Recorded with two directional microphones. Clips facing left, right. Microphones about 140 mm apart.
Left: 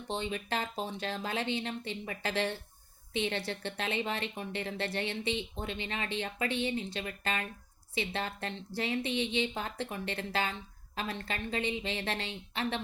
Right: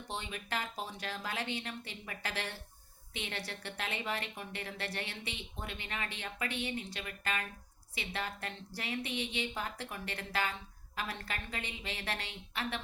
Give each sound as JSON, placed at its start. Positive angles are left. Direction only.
{"t": 0.1, "sound": "a woman's voice", "side_deg": 25}